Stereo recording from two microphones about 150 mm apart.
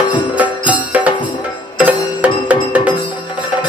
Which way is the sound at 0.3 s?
10° right (ahead or behind).